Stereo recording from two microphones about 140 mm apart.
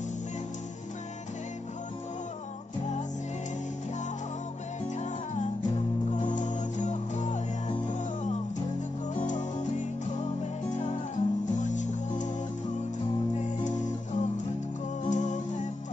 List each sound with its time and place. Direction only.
6.1 s music: 60° left (ahead or behind)
13.4 s music: 60° left (ahead or behind)